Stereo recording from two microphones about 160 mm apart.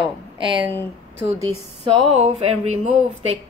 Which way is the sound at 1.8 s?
40° right (ahead or behind).